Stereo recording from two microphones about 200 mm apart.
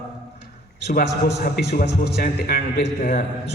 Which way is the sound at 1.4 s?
50° left (ahead or behind).